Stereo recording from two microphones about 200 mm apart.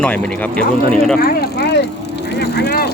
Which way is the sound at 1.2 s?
55° left (ahead or behind).